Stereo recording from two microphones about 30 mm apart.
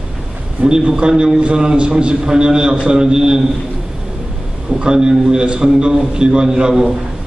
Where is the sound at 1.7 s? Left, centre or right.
Right.